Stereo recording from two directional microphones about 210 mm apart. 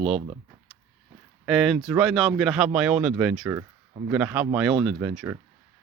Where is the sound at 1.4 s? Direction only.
Centre (ahead or behind).